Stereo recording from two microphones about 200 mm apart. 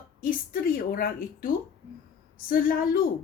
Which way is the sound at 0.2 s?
45° left (ahead or behind).